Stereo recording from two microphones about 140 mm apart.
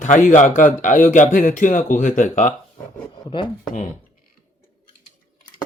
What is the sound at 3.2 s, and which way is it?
Speech, 35° left (ahead or behind).